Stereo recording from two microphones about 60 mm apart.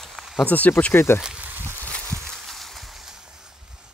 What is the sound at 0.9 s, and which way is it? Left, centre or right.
Speech, left.